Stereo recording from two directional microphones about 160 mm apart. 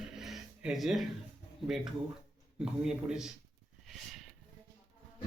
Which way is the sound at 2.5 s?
5° right (ahead or behind).